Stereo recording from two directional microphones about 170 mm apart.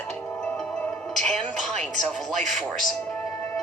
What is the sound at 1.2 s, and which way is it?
Music, centre (ahead or behind).